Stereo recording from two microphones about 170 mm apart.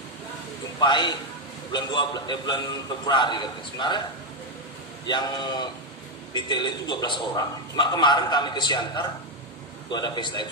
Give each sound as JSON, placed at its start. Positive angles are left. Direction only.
{"t": 0.7, "sound": "a man's voice", "side_deg": 25}
{"t": 5.0, "sound": "a man's voice", "side_deg": 25}